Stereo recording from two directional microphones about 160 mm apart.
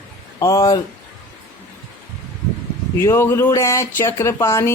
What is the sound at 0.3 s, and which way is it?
Speech, 20° left (ahead or behind).